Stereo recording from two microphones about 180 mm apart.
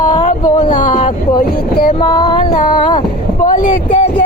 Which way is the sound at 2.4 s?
50° left (ahead or behind).